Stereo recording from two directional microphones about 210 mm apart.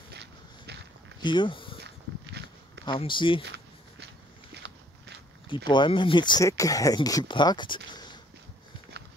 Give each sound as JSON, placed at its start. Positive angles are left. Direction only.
{"t": 0.1, "sound": "walk", "side_deg": -55}
{"t": 1.2, "sound": "speech", "side_deg": 20}
{"t": 2.3, "sound": "walk", "side_deg": -50}
{"t": 2.8, "sound": "speech", "side_deg": 25}
{"t": 4.6, "sound": "biting", "side_deg": -55}
{"t": 5.7, "sound": "speech", "side_deg": 20}